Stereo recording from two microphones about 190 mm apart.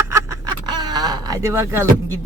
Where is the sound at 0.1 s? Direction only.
20° right (ahead or behind).